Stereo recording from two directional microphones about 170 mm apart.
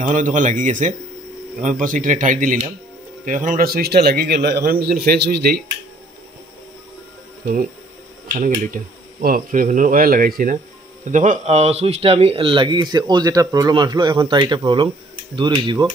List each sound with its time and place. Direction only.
0.1 s a man's voice: 50° right (ahead or behind); by 5.6 s 75° right (ahead or behind)
8.4 s speech: 50° right (ahead or behind)
11.1 s a man's voice: 45° right (ahead or behind); by 15.9 s 25° right (ahead or behind)